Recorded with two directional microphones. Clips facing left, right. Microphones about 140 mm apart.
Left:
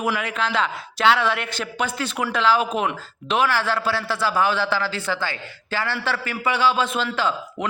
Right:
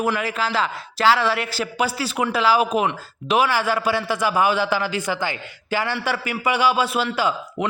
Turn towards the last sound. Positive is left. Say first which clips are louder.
# right 2 dB
turn(degrees=-10)  # may be behind; listen again after turning